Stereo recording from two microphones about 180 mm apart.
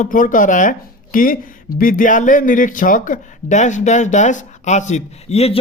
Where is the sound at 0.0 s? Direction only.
50° left (ahead or behind).